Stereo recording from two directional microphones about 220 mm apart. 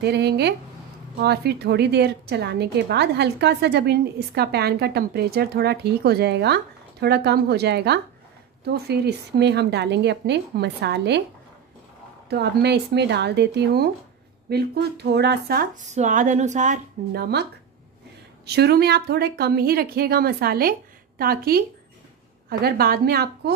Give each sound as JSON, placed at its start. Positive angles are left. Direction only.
{"t": 0.0, "sound": "speech", "side_deg": -50}
{"t": 12.3, "sound": "speech", "side_deg": -50}